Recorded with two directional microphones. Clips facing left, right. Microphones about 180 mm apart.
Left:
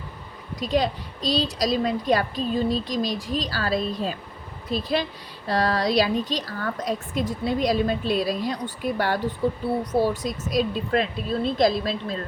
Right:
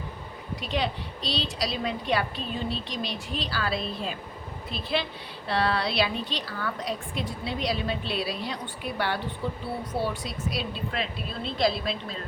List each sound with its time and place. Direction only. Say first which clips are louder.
0.6 s a woman's voice: left 6 dB; 40° left (ahead or behind)